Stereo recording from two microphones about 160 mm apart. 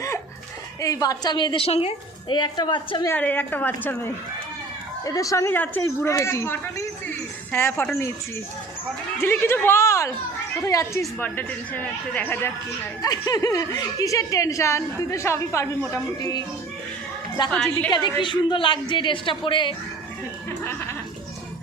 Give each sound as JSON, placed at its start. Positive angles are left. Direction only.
{"t": 0.8, "sound": "a woman's voice", "side_deg": 20}
{"t": 3.1, "sound": "a woman's voice", "side_deg": 10}
{"t": 9.2, "sound": "a woman's voice", "side_deg": 15}
{"t": 17.5, "sound": "a woman's voice", "side_deg": 10}
{"t": 17.9, "sound": "speech", "side_deg": 30}
{"t": 20.5, "sound": "a woman's voice", "side_deg": 15}